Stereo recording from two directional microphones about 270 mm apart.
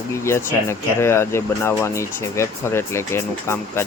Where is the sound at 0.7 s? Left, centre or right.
Centre.